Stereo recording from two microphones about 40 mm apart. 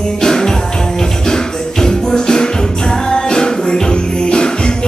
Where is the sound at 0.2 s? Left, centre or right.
Centre.